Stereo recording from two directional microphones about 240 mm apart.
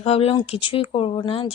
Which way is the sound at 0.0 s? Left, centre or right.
Left.